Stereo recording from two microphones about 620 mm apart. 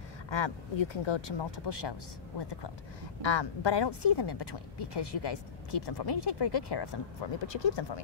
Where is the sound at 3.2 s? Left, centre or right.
Left.